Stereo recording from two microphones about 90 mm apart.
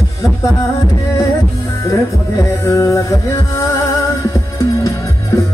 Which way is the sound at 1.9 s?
35° left (ahead or behind).